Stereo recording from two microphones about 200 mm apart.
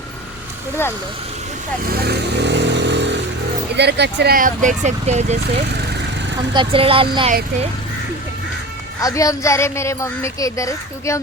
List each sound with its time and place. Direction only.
1.9 s vehicle: 50° right (ahead or behind)
3.8 s speech: 55° right (ahead or behind); by 5.4 s 35° right (ahead or behind)
6.5 s speech: 25° right (ahead or behind)
9.0 s a woman's voice: 15° left (ahead or behind)